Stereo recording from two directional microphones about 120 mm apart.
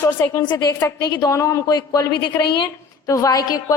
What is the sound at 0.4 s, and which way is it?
A woman's voice, 30° left (ahead or behind).